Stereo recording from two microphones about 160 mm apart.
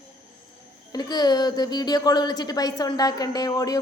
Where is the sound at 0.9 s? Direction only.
25° left (ahead or behind).